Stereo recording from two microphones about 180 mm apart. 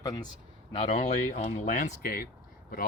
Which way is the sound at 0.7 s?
35° left (ahead or behind).